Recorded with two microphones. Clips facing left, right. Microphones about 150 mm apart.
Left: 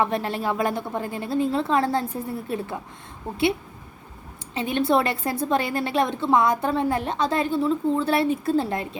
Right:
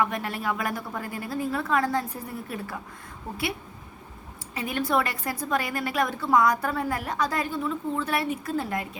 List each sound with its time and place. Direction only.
0.0 s a woman's voice: 30° left (ahead or behind)
4.5 s a woman's voice: 25° left (ahead or behind)